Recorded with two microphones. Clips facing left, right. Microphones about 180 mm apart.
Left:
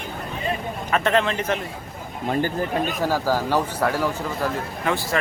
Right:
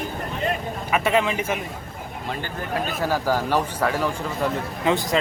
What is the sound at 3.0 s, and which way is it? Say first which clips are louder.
Speech: right 1 dB; 10° left (ahead or behind).